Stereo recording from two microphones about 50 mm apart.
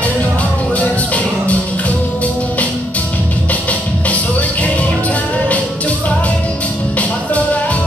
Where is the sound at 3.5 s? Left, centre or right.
Left.